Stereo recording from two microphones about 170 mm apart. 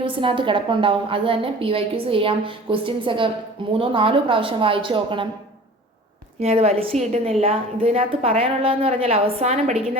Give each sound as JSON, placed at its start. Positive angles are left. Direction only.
{"t": 0.0, "sound": "a woman's voice", "side_deg": -30}
{"t": 6.4, "sound": "a woman's voice", "side_deg": -40}